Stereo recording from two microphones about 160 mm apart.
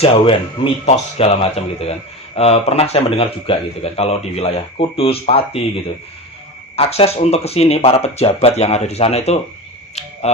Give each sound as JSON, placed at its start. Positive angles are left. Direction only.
{"t": 0.0, "sound": "speech", "side_deg": 35}
{"t": 6.7, "sound": "speech", "side_deg": 40}
{"t": 9.9, "sound": "a sound", "side_deg": 40}